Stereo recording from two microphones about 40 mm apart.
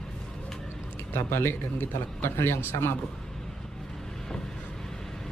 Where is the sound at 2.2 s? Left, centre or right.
Left.